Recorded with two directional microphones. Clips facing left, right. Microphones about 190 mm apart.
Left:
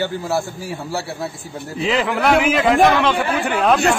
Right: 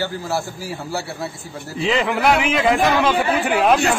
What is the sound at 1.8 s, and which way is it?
A man's voice, centre (ahead or behind).